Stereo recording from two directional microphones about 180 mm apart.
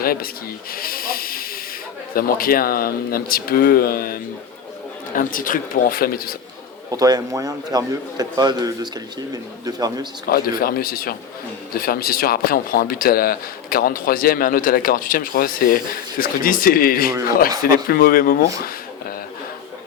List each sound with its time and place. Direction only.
0.0 s speech: 55° left (ahead or behind)
0.7 s hiss: 55° left (ahead or behind)
2.1 s speech: 55° left (ahead or behind)
6.9 s a man's voice: 20° right (ahead or behind)
10.2 s speech: 55° left (ahead or behind)